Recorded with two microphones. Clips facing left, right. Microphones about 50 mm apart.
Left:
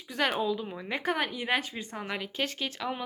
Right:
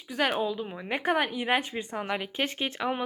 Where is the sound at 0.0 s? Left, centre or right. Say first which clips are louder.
Right 1 dB; centre.